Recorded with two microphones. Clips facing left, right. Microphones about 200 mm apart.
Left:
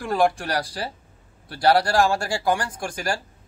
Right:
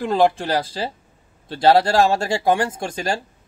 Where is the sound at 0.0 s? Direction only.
20° right (ahead or behind).